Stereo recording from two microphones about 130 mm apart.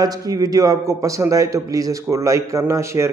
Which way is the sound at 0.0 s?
30° right (ahead or behind).